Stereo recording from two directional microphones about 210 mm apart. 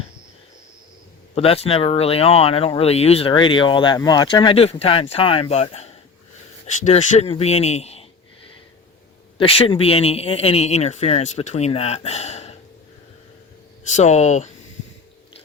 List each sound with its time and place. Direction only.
1.4 s speech: 25° left (ahead or behind)
9.4 s speech: 25° left (ahead or behind)
13.9 s speech: 35° left (ahead or behind)